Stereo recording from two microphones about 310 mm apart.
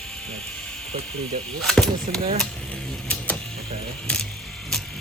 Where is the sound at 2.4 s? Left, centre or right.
Centre.